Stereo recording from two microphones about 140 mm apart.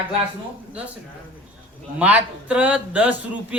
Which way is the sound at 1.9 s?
10° right (ahead or behind).